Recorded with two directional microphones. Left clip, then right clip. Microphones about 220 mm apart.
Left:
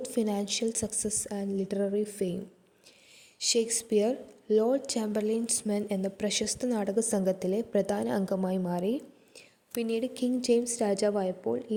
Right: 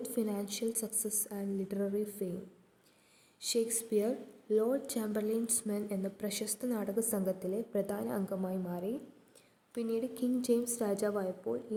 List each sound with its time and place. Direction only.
0.0 s a woman's voice: 20° left (ahead or behind)
3.5 s a woman's voice: 25° left (ahead or behind)